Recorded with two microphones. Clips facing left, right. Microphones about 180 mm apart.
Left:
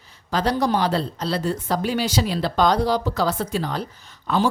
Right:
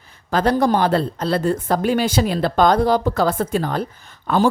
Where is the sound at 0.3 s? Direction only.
55° right (ahead or behind).